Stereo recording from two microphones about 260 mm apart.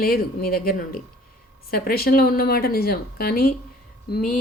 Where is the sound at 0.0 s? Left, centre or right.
Left.